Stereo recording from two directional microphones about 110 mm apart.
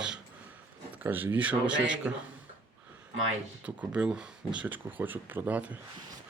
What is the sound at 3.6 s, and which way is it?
Speech, 15° right (ahead or behind).